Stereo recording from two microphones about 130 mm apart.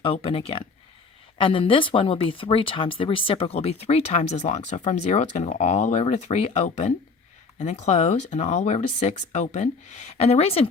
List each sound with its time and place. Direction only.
0.0 s speech: 45° left (ahead or behind)